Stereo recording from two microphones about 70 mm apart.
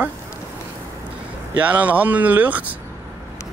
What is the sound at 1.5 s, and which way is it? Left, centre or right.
Speech, right.